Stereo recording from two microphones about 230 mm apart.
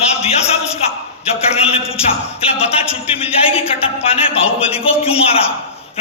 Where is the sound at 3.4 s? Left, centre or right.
Left.